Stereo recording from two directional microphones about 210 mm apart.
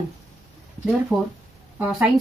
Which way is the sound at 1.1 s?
5° right (ahead or behind).